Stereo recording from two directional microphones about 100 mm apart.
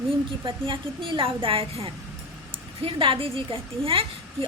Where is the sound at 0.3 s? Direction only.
55° right (ahead or behind).